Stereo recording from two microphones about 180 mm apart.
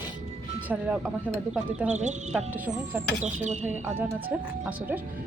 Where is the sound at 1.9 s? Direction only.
40° right (ahead or behind).